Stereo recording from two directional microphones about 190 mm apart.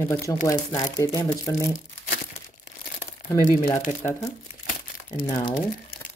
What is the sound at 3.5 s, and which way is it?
Speech, 45° left (ahead or behind).